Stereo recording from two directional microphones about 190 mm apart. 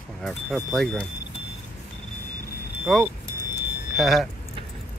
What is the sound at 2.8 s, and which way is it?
Speech, centre (ahead or behind).